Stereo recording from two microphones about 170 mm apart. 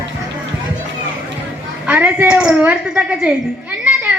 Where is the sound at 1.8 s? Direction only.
10° right (ahead or behind).